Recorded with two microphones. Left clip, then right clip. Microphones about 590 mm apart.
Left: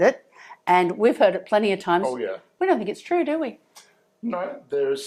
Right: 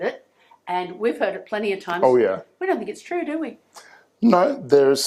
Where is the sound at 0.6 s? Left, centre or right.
Left.